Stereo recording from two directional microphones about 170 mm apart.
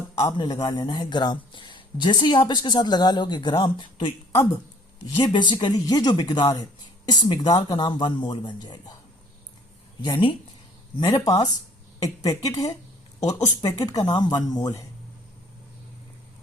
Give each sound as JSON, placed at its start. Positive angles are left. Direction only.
{"t": 0.2, "sound": "speech", "side_deg": 20}
{"t": 10.0, "sound": "speech", "side_deg": 30}